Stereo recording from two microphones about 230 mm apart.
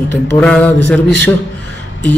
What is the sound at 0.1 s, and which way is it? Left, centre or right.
A man's voice, centre.